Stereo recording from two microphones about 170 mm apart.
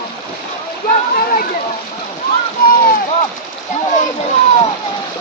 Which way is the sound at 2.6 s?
60° left (ahead or behind).